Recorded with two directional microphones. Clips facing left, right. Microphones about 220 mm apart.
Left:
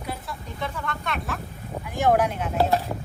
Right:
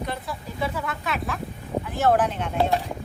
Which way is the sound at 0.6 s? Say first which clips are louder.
Right 3 dB; 5° right (ahead or behind).